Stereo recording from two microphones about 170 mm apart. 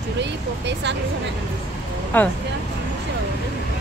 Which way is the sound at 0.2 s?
90° right.